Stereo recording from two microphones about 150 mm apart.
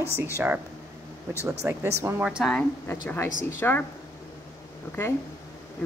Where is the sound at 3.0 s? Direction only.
15° left (ahead or behind).